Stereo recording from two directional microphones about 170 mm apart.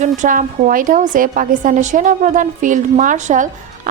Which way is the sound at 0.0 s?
50° right (ahead or behind).